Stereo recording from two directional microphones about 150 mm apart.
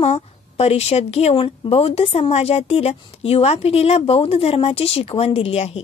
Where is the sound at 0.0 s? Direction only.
45° left (ahead or behind).